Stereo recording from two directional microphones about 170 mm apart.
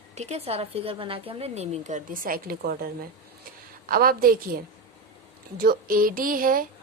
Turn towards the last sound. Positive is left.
turn(degrees=-55)  # may be behind; listen again after turning